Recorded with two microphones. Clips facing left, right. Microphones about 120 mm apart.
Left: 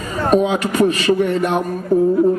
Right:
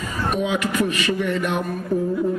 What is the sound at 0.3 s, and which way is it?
A man's voice, 35° left (ahead or behind).